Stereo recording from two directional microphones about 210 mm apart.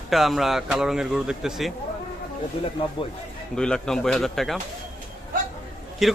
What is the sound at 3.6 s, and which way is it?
Speech, 5° left (ahead or behind).